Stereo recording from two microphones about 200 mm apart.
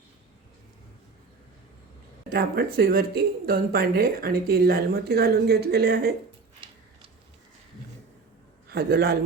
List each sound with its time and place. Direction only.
2.3 s speech: 50° right (ahead or behind)
8.7 s a man's voice: 50° right (ahead or behind)